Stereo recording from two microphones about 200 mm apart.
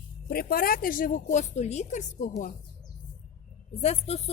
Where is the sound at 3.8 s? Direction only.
30° left (ahead or behind).